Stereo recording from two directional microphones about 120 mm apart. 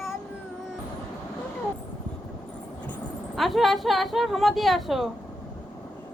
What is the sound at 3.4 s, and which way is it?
A woman's voice, centre (ahead or behind).